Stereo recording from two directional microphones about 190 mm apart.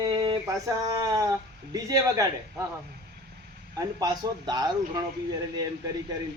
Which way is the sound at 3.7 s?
20° right (ahead or behind).